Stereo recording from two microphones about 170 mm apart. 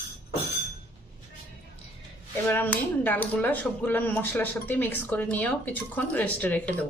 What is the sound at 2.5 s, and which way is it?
Speech, 10° left (ahead or behind).